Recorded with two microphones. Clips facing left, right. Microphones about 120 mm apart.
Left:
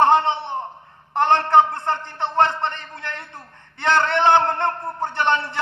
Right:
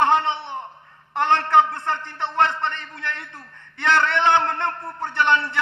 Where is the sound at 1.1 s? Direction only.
20° left (ahead or behind).